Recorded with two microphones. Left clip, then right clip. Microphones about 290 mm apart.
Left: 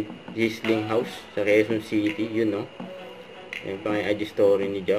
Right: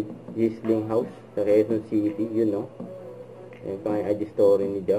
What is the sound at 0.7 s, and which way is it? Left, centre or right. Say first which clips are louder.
Speech: left 1 dB; left.